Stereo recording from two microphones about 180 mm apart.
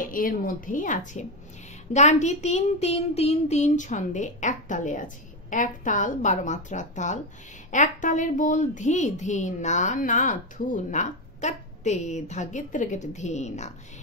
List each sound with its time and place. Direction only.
0.0 s a woman's voice: 50° left (ahead or behind)